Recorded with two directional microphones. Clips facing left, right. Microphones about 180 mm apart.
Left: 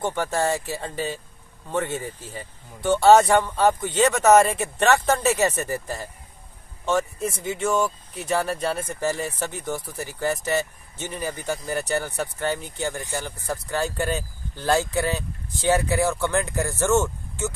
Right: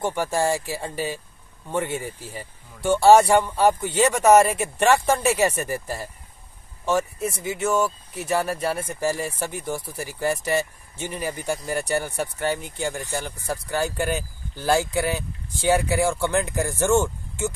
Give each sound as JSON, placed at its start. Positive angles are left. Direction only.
{"t": 0.0, "sound": "speech", "side_deg": -10}